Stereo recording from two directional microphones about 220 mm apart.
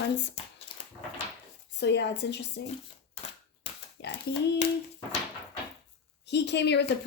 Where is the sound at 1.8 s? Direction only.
50° left (ahead or behind).